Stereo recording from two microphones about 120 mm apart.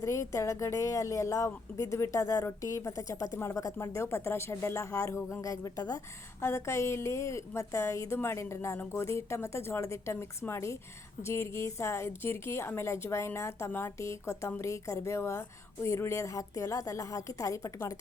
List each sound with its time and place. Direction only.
0.0 s a woman's voice: 25° left (ahead or behind)